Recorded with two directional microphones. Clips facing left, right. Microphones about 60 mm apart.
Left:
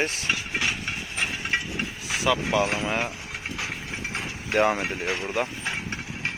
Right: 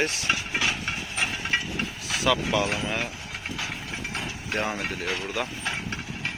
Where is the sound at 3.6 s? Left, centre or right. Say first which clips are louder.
Left 1 dB; left.